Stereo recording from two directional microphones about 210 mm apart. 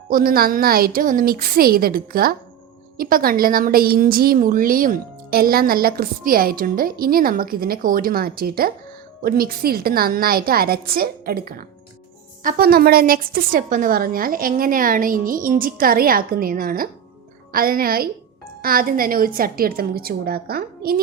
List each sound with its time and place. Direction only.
0.1 s a woman's voice: 45° right (ahead or behind)